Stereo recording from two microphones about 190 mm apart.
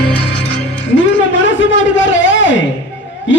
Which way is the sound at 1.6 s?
80° left.